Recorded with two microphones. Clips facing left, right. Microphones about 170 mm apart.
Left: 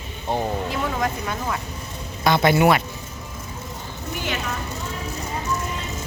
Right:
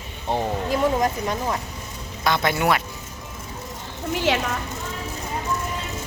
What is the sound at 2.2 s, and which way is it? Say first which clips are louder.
Speech: left 5 dB; 5° left (ahead or behind).